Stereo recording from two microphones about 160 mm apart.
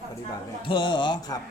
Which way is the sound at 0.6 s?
30° left (ahead or behind).